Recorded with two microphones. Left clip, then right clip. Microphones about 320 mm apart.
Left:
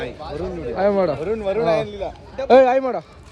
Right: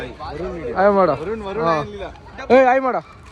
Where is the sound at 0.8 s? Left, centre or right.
Centre.